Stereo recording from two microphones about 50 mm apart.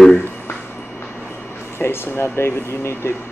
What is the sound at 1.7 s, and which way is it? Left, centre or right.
Speech, left.